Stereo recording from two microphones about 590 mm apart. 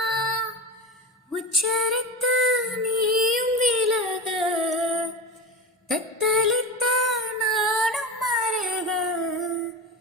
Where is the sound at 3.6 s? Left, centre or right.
Centre.